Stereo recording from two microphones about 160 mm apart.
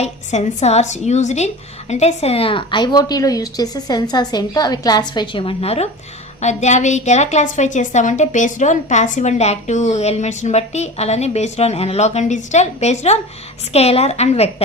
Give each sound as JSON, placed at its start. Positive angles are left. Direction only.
{"t": 0.0, "sound": "a woman's voice", "side_deg": 45}